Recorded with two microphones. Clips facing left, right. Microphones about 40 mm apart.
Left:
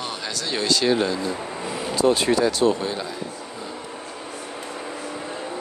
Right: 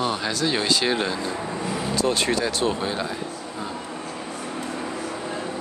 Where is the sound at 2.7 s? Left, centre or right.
Centre.